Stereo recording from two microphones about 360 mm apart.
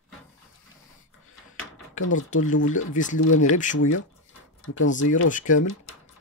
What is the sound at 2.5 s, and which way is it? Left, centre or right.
Speech, left.